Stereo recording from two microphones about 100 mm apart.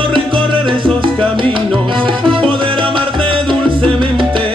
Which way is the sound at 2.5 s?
60° right (ahead or behind).